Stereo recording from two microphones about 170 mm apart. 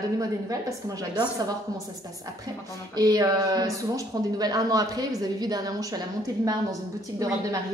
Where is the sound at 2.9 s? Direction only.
20° right (ahead or behind).